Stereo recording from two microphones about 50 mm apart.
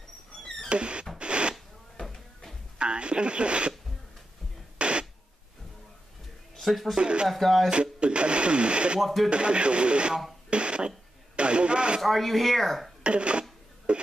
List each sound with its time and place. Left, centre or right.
0.7 s a sound: right
1.1 s rodents: right
2.0 s a sound: centre
2.8 s radio: right
4.7 s music: right
6.5 s speech: centre
7.0 s speech: centre
7.2 s speech: centre
7.7 s speech: right
9.0 s speech: centre
9.3 s speech: right
12.0 s speech: centre
13.0 s a sound: right